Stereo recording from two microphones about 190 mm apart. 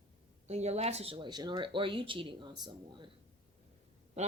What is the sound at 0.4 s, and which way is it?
Speech, 35° right (ahead or behind).